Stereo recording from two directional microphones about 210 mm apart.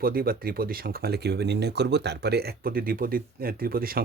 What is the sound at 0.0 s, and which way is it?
Speech, 45° right (ahead or behind).